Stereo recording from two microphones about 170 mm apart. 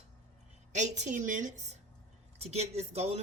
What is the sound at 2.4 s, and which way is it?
Speech, 40° right (ahead or behind).